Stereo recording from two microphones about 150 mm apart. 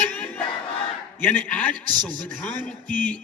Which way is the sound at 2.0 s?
30° right (ahead or behind).